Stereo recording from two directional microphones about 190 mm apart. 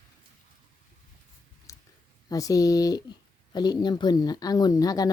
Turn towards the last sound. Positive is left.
turn(degrees=20)  # may be behind; listen again after turning